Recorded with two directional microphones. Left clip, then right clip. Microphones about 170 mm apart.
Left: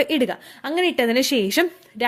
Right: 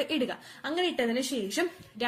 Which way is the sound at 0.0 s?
55° left (ahead or behind).